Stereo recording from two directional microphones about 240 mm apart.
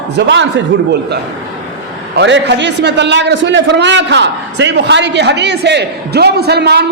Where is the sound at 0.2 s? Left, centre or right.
Right.